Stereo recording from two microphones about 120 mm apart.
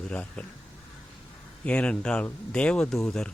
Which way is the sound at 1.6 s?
10° left (ahead or behind).